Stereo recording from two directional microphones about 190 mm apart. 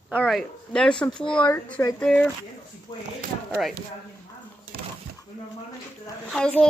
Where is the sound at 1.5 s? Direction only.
10° left (ahead or behind).